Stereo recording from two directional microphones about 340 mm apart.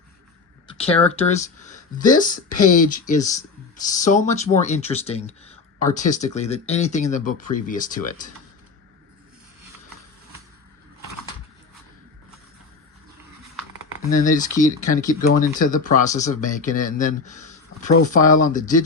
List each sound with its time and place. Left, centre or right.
0.8 s speech: centre
14.1 s speech: left